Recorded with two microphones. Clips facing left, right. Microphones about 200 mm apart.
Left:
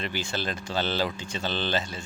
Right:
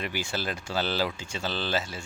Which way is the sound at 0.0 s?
10° right (ahead or behind).